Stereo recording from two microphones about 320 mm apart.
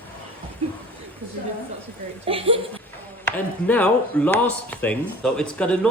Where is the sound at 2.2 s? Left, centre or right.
Centre.